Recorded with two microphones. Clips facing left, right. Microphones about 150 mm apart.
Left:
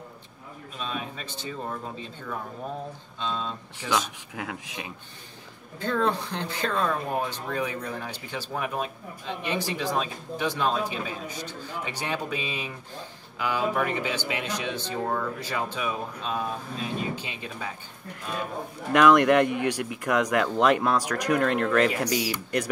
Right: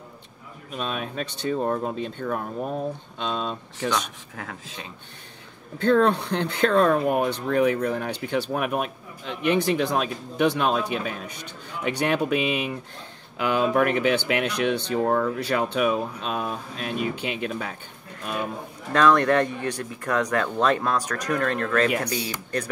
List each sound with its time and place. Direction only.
0.7 s speech: 70° right (ahead or behind)
3.9 s speech: 15° left (ahead or behind)
5.8 s speech: 65° right (ahead or behind)
18.9 s speech: 15° left (ahead or behind)